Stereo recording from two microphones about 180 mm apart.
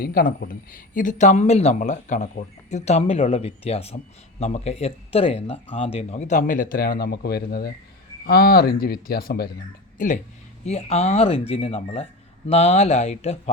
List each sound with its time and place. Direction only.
0.0 s speech: 55° left (ahead or behind)
10.0 s speech: 45° left (ahead or behind)
10.7 s speech: 35° left (ahead or behind)